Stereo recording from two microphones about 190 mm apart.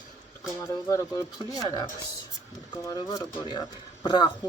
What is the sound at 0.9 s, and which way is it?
Speech, 15° left (ahead or behind).